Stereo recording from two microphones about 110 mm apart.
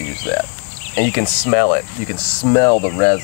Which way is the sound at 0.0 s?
25° left (ahead or behind).